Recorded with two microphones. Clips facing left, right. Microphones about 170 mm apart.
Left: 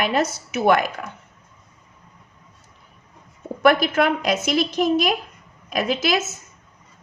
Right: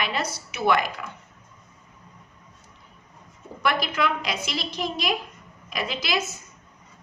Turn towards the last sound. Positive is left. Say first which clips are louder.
# left 8 dB
turn(degrees=50)  # may be behind; listen again after turning